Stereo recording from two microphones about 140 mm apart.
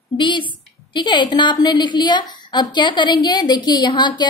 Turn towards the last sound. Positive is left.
turn(degrees=35)  # may be behind; listen again after turning